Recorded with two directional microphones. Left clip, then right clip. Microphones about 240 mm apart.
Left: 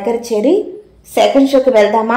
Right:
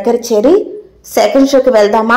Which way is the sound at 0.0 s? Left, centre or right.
Right.